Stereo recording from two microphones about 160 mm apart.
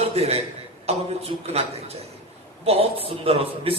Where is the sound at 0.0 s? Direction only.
40° right (ahead or behind).